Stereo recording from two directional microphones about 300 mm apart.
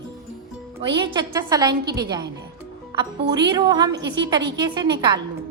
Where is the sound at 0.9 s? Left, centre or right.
Centre.